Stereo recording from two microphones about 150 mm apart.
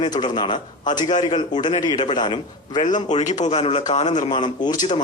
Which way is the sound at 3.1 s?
50° left (ahead or behind).